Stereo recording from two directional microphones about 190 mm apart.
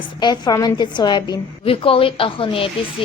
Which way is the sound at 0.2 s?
20° left (ahead or behind).